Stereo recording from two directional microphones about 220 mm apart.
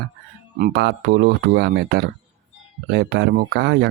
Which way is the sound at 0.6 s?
45° right (ahead or behind).